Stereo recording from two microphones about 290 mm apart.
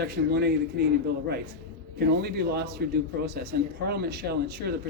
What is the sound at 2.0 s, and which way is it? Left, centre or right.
A man's voice, right.